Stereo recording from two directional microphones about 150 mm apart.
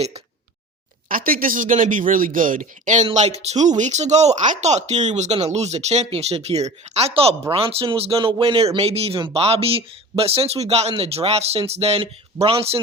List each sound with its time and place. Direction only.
1.0 s speech: 70° right (ahead or behind); by 12.5 s 40° right (ahead or behind)